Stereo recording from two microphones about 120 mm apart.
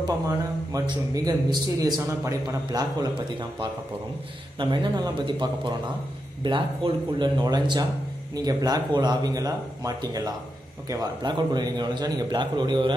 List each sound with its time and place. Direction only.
0.7 s a man's voice: 30° right (ahead or behind)